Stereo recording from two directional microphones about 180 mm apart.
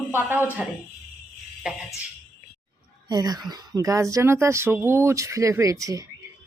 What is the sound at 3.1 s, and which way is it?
Speech, 20° right (ahead or behind).